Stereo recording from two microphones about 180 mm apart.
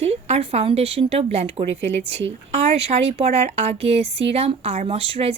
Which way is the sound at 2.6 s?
35° right (ahead or behind).